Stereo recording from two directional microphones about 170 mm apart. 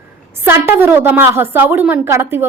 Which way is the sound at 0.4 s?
15° right (ahead or behind).